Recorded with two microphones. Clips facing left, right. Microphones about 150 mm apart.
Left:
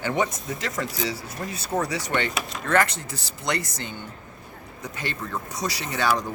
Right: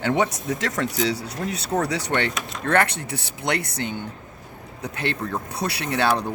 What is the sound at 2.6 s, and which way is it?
A man's voice, 60° right (ahead or behind).